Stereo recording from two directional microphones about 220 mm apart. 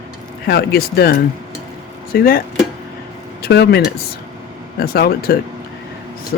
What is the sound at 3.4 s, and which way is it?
Speech, 50° left (ahead or behind).